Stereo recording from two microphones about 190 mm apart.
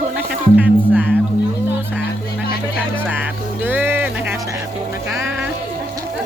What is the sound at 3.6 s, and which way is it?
Music, 10° right (ahead or behind).